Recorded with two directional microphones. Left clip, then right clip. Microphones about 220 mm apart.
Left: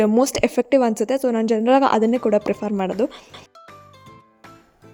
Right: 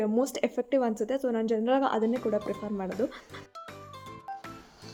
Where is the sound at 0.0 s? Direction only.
40° left (ahead or behind).